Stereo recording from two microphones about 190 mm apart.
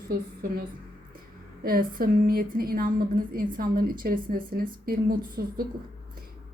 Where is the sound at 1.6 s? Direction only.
50° right (ahead or behind).